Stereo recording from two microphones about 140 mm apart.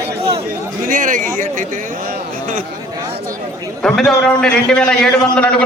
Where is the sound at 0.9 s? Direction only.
70° right (ahead or behind).